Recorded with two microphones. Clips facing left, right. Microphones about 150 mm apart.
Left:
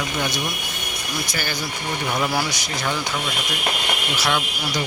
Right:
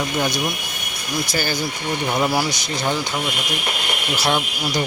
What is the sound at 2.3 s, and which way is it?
Speech, 15° right (ahead or behind).